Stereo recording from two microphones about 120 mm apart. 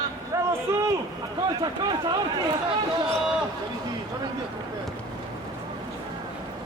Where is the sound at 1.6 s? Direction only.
35° right (ahead or behind).